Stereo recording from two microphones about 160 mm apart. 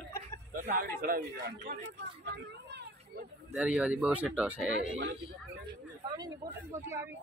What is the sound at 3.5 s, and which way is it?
Speech, 10° right (ahead or behind).